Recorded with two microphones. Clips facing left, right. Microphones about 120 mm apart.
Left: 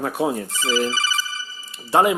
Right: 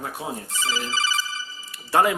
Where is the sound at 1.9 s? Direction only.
20° left (ahead or behind).